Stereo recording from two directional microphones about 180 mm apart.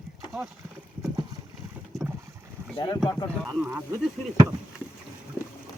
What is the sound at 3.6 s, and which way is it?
Speech, 10° right (ahead or behind).